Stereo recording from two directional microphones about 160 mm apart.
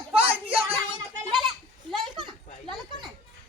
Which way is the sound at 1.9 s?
30° right (ahead or behind).